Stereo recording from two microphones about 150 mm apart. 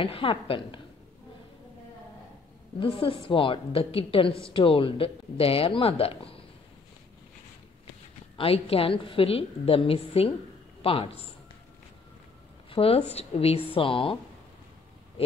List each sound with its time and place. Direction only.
0.0 s speech: 35° left (ahead or behind)
2.8 s speech: 35° left (ahead or behind)
8.4 s a man's voice: 40° left (ahead or behind)
12.6 s speech: 40° left (ahead or behind)